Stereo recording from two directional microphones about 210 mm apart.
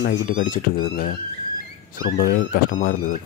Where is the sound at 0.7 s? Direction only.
40° left (ahead or behind).